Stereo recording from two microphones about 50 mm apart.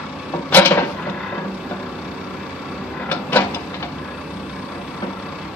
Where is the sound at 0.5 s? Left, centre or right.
Left.